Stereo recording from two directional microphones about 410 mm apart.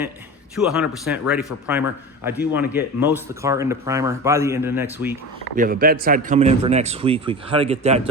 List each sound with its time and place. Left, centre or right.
0.5 s speech: centre
5.5 s speech: right